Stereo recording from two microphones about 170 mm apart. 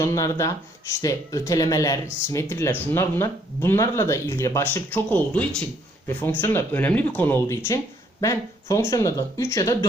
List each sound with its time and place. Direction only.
0.0 s speech: 20° left (ahead or behind)